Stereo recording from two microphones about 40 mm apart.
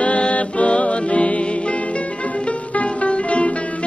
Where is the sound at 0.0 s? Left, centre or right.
Left.